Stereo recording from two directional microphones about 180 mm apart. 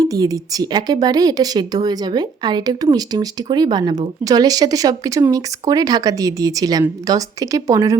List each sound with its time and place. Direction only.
0.0 s a woman's voice: 20° right (ahead or behind)